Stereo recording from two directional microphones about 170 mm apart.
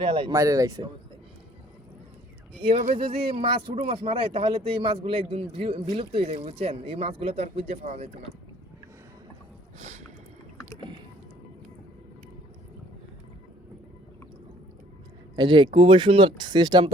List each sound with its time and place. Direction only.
0.0 s speech: 30° right (ahead or behind)
0.3 s speech: 20° right (ahead or behind)
2.6 s speech: 40° right (ahead or behind)
9.7 s speech: 40° right (ahead or behind)
15.4 s speech: 30° right (ahead or behind)